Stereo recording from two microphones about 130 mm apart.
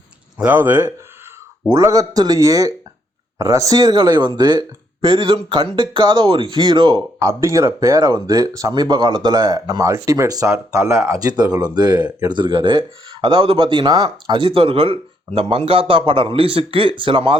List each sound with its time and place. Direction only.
0.4 s speech: 15° right (ahead or behind); by 7.0 s 35° right (ahead or behind)
7.2 s speech: 25° right (ahead or behind)
11.3 s speech: 30° right (ahead or behind)